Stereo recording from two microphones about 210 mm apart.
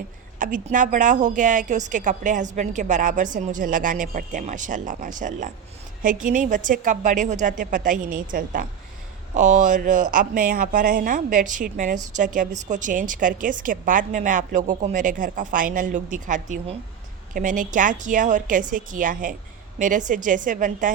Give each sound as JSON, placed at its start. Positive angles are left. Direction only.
{"t": 0.3, "sound": "a woman's voice", "side_deg": -40}